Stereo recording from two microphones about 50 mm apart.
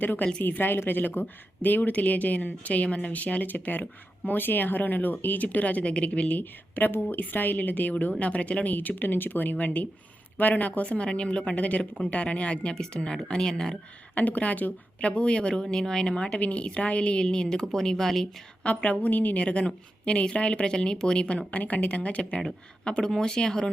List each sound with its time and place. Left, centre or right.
0.0 s a woman's voice: left
8.7 s a woman's voice: left; by 13.7 s centre
14.2 s a woman's voice: left; by 18.3 s centre
18.6 s a woman's voice: left
22.4 s a woman's voice: centre